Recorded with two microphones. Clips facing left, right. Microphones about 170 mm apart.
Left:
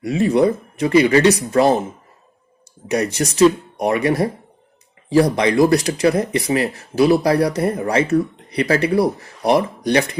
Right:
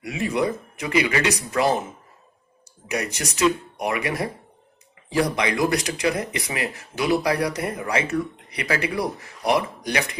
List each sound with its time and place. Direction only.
0.0 s speech: 35° left (ahead or behind)
2.9 s speech: 35° left (ahead or behind)